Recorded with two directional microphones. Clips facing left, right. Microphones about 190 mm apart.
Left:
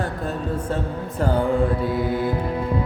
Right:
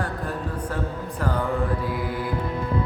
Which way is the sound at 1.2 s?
30° left (ahead or behind).